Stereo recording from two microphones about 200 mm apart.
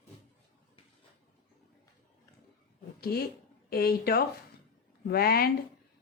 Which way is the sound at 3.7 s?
50° left (ahead or behind).